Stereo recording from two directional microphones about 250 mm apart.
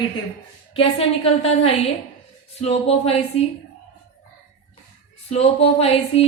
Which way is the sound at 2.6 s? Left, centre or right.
Left.